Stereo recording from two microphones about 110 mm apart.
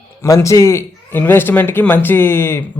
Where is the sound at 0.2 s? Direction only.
25° left (ahead or behind).